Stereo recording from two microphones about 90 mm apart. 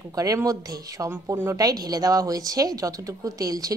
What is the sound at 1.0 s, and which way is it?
Speech, 30° right (ahead or behind).